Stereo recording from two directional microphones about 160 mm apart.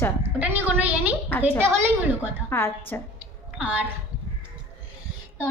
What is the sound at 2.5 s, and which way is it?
Speech, 15° left (ahead or behind).